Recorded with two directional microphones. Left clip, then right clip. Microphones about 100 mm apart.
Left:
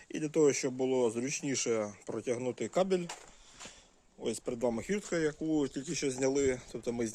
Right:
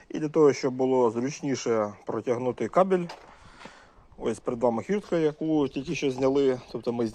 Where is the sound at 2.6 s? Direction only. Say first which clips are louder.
Right 9 dB; 35° left (ahead or behind).